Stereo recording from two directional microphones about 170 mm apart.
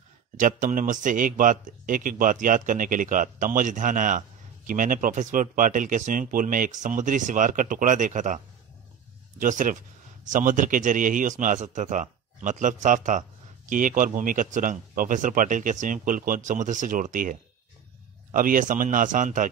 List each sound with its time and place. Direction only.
0.4 s speech: 50° right (ahead or behind)
9.4 s speech: 50° right (ahead or behind)